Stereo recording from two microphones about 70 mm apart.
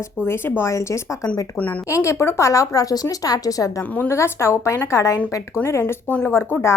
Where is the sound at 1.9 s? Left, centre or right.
Left.